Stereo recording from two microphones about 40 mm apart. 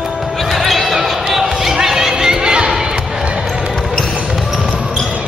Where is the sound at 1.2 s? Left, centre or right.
Centre.